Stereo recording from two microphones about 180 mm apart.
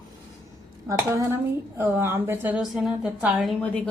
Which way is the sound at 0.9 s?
15° right (ahead or behind).